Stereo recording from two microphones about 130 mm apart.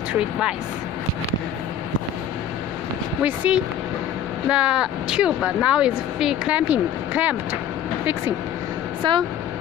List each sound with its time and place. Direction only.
3.3 s speech: 10° right (ahead or behind)
9.0 s speech: 35° right (ahead or behind)